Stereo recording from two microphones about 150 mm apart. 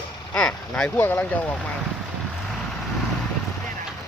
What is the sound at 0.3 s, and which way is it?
Speech, 5° left (ahead or behind).